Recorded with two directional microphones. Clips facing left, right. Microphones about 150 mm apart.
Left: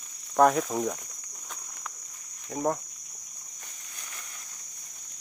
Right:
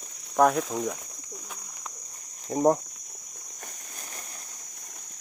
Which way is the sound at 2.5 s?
30° right (ahead or behind).